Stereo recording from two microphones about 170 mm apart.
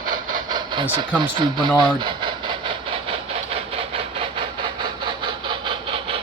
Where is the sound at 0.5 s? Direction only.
25° right (ahead or behind).